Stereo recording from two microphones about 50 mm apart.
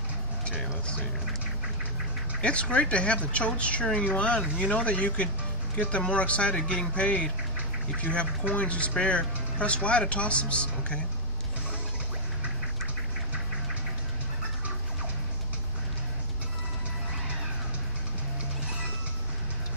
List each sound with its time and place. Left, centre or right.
0.5 s speech: left
2.4 s speech: left